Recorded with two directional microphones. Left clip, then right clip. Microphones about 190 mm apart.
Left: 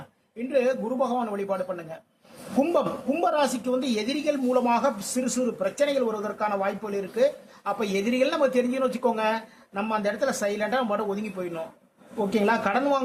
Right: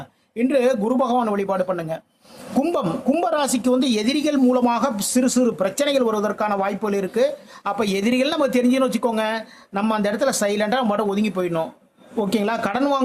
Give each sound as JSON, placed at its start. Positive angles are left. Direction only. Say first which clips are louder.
{"t": 0.3, "sound": "speech", "louder": "right 6 dB", "side_deg": -40}